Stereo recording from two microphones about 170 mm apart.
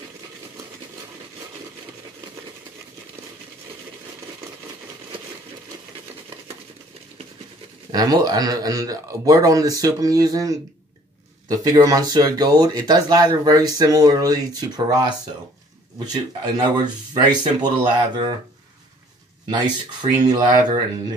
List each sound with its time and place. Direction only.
7.9 s speech: 20° right (ahead or behind)
19.5 s speech: 25° right (ahead or behind)